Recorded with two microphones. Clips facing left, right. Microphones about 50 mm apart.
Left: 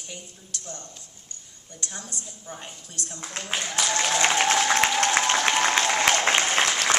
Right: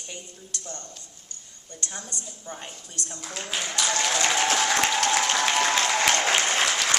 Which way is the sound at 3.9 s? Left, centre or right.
Left.